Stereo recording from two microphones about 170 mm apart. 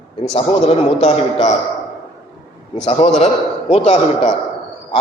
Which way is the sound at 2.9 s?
40° left (ahead or behind).